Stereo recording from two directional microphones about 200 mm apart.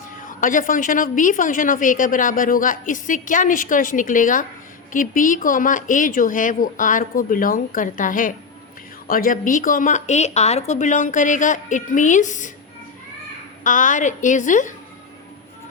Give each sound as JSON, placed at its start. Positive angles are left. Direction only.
{"t": 0.2, "sound": "a woman's voice", "side_deg": 40}
{"t": 13.7, "sound": "a woman's voice", "side_deg": 40}